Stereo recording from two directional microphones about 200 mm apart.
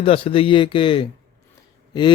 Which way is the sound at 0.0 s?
25° left (ahead or behind).